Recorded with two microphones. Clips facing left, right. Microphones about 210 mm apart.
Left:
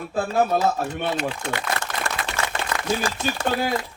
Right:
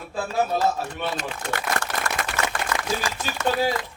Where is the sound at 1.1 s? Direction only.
45° right (ahead or behind).